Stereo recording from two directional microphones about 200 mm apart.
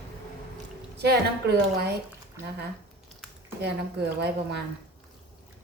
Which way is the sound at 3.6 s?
55° right (ahead or behind).